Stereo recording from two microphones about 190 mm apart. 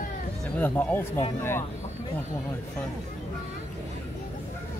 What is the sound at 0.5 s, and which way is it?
Speech, 10° left (ahead or behind).